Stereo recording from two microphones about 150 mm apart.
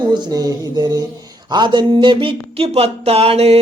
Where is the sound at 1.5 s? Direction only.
30° right (ahead or behind).